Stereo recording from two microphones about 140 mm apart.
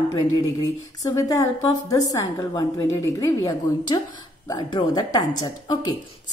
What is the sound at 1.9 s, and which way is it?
A woman's voice, 25° left (ahead or behind).